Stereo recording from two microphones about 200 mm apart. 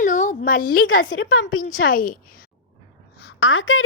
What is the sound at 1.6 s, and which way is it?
Speech, 40° left (ahead or behind).